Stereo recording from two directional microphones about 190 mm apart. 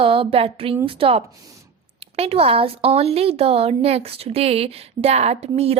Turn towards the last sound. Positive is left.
turn(degrees=-35)  # may be behind; listen again after turning